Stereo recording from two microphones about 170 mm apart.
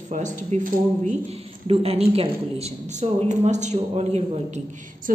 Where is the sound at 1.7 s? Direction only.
35° right (ahead or behind).